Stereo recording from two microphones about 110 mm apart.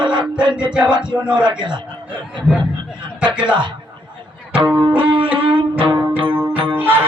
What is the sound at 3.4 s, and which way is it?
Speech, 45° right (ahead or behind).